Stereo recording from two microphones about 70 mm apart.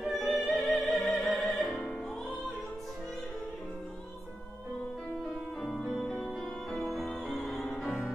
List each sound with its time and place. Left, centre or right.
0.1 s music: centre
1.7 s music: centre
5.6 s music: centre
5.9 s music: centre
6.9 s music: centre
7.7 s music: centre